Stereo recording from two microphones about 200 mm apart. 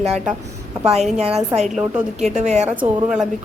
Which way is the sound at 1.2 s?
30° right (ahead or behind).